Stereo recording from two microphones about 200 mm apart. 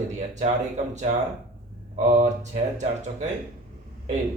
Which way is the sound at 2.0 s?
35° right (ahead or behind).